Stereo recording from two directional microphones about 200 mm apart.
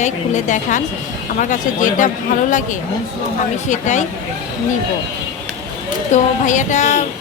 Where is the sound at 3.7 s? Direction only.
35° left (ahead or behind).